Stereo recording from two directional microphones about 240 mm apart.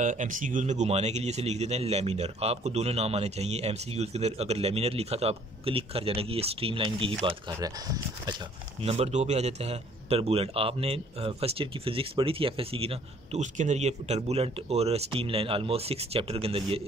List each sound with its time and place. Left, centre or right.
0.0 s speech: right; by 8.4 s centre
8.8 s speech: right